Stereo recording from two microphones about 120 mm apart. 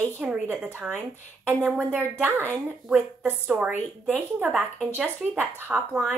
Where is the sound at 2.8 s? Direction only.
15° right (ahead or behind).